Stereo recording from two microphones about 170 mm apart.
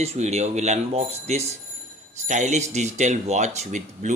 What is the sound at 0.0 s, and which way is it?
Speech, 40° right (ahead or behind).